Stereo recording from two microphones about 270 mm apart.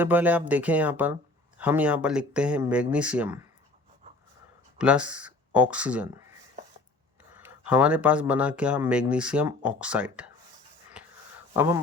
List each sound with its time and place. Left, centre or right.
0.0 s speech: centre
4.8 s speech: centre
7.3 s speech: centre
11.5 s speech: centre